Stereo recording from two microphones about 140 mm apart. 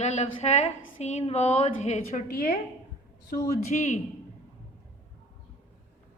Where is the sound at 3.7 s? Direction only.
55° left (ahead or behind).